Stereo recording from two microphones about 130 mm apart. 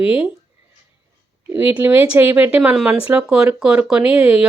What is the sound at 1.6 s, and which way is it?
Speech, 15° right (ahead or behind).